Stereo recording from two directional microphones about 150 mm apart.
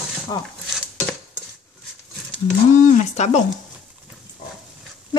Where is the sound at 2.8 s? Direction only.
55° left (ahead or behind).